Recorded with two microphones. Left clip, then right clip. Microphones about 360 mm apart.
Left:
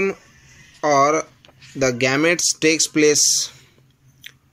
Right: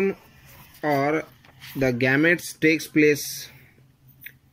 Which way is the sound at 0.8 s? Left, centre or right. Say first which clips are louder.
Left 7 dB; left.